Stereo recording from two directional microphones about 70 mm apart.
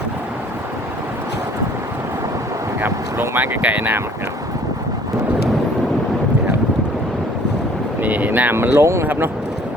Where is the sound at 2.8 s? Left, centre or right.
Right.